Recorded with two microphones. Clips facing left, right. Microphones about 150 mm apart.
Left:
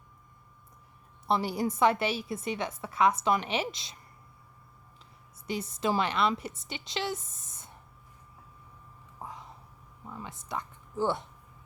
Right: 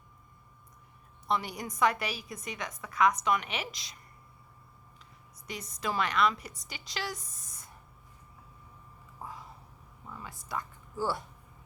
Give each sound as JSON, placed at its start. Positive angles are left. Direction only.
{"t": 1.3, "sound": "a woman's voice", "side_deg": 30}
{"t": 5.5, "sound": "a woman's voice", "side_deg": 30}
{"t": 10.1, "sound": "speech", "side_deg": 20}